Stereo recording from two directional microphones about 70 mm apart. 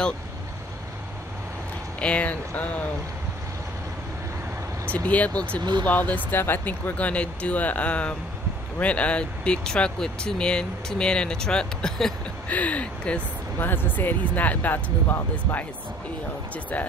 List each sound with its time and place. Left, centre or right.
2.0 s speech: centre
4.9 s speech: left
5.6 s speech: right
5.9 s speech: left
12.4 s speech: left